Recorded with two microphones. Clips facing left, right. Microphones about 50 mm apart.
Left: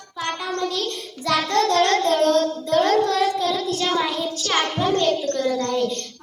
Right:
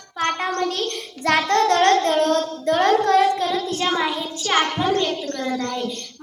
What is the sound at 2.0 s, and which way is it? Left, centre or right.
Child singing, right.